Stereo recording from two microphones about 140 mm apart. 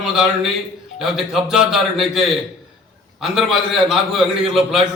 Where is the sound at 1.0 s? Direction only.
Centre (ahead or behind).